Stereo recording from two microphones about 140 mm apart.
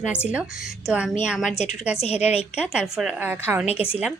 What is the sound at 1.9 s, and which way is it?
Speech, 50° left (ahead or behind).